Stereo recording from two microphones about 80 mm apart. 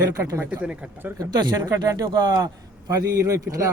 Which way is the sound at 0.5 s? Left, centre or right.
Centre.